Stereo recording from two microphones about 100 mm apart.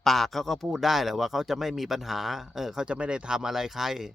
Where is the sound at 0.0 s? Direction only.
Centre (ahead or behind).